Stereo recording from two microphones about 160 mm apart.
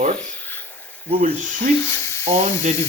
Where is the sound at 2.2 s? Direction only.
45° right (ahead or behind).